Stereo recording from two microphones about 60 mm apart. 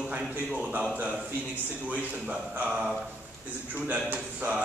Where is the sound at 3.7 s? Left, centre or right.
Right.